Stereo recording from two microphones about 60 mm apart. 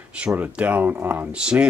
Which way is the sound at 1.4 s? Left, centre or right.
Centre.